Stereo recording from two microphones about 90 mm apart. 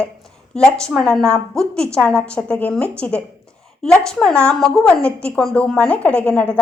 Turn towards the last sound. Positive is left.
turn(degrees=15)  # may be behind; listen again after turning